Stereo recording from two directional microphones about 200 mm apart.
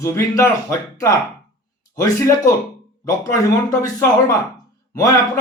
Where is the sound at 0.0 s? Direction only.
15° left (ahead or behind).